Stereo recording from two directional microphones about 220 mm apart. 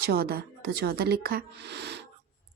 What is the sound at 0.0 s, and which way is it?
A woman's voice, 45° right (ahead or behind).